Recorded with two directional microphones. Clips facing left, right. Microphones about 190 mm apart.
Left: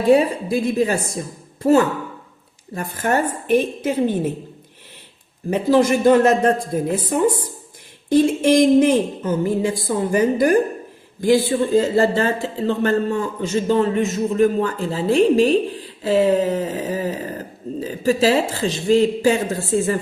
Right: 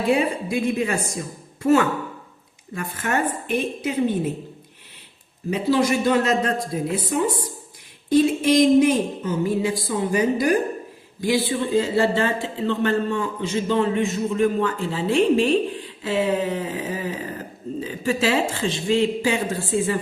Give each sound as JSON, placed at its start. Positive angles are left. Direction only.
{"t": 0.5, "sound": "a man's voice", "side_deg": 35}
{"t": 5.5, "sound": "speech", "side_deg": 50}
{"t": 8.2, "sound": "a man's voice", "side_deg": 50}